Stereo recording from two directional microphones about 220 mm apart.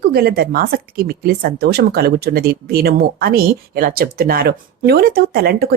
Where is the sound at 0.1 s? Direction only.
45° right (ahead or behind).